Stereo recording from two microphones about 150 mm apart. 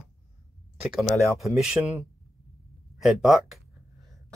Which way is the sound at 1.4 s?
5° right (ahead or behind).